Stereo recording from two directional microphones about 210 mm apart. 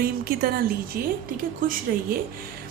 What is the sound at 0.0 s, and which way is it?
A woman's voice, 45° right (ahead or behind).